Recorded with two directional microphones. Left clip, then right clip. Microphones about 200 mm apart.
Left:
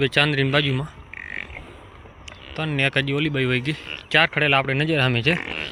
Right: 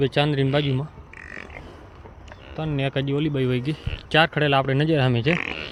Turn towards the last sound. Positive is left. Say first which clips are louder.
# left 1 dB
turn(degrees=-15)  # may be behind; listen again after turning